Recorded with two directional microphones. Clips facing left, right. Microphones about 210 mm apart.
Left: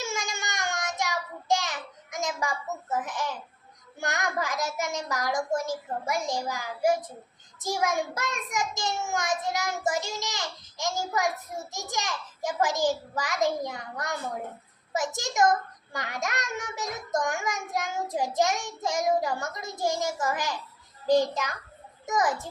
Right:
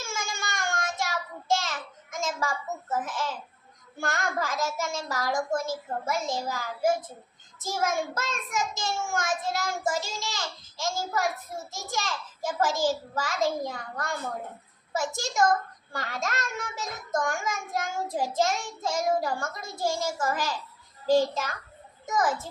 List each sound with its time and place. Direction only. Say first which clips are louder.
0.0 s child singing: left 2 dB; 20° left (ahead or behind)
4.0 s a child's voice: even; 15° left (ahead or behind)